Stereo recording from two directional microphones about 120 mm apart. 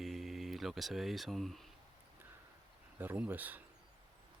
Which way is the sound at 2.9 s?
15° right (ahead or behind).